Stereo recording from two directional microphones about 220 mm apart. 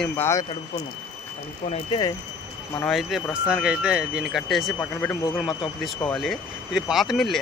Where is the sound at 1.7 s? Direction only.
20° left (ahead or behind).